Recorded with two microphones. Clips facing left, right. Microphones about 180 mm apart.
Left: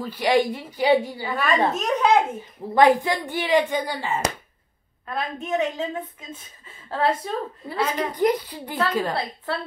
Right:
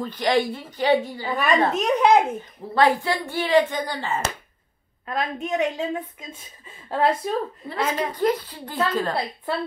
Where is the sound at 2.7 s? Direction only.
15° left (ahead or behind).